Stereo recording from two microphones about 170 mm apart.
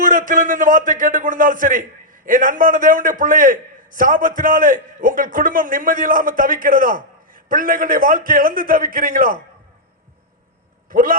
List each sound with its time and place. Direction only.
0.0 s a man's voice: 50° right (ahead or behind)
10.8 s speech: 55° right (ahead or behind)